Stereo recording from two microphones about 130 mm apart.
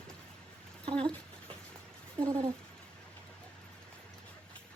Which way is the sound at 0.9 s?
35° right (ahead or behind).